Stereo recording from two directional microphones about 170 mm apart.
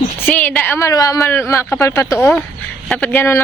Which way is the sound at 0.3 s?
10° left (ahead or behind).